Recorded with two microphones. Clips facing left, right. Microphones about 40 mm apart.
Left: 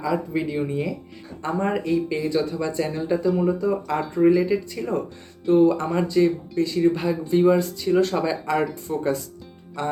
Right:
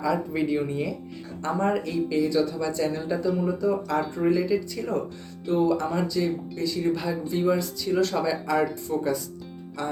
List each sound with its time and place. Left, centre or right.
0.0 s speech: centre
1.5 s speech: centre
2.9 s speech: centre
3.6 s speech: left
4.1 s speech: centre
4.4 s speech: left